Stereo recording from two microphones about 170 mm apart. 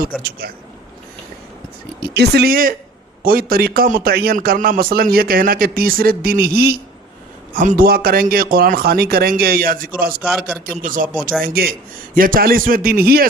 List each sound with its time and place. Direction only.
0.2 s a man's voice: 65° right (ahead or behind)
2.1 s a man's voice: 75° right (ahead or behind)
7.5 s a man's voice: 55° right (ahead or behind)
10.2 s a man's voice: centre (ahead or behind)
10.7 s a man's voice: 55° right (ahead or behind)